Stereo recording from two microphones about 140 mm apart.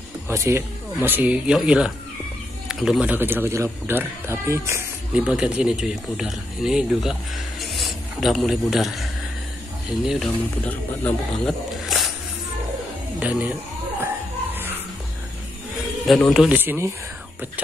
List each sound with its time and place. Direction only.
0.3 s speech: 20° right (ahead or behind)
5.1 s speech: 5° right (ahead or behind)
10.6 s speech: 10° left (ahead or behind)
13.2 s speech: 10° right (ahead or behind)
14.0 s music: 15° right (ahead or behind)
16.1 s speech: centre (ahead or behind)
16.5 s speech: 15° right (ahead or behind)